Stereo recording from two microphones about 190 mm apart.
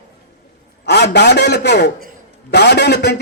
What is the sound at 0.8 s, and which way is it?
A man's voice, 60° left (ahead or behind).